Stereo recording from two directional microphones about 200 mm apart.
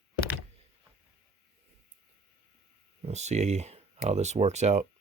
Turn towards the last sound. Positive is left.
turn(degrees=-35)  # may be behind; listen again after turning